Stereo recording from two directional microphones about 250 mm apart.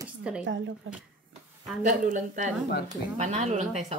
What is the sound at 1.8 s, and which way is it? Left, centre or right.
Speech, right.